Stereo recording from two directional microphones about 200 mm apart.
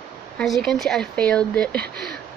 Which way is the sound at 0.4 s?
Centre (ahead or behind).